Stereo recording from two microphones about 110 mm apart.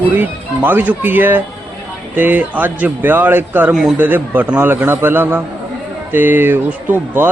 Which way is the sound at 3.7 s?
5° right (ahead or behind).